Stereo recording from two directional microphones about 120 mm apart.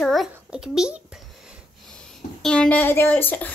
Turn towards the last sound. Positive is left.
turn(degrees=15)  # may be behind; listen again after turning